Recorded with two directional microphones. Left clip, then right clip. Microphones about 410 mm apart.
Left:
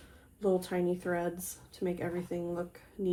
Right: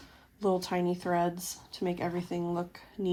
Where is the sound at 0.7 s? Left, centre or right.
Right.